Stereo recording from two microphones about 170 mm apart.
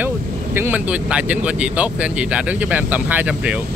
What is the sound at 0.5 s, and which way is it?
Speech, 10° right (ahead or behind).